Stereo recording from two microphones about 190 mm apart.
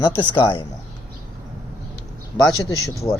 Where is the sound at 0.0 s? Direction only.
25° left (ahead or behind).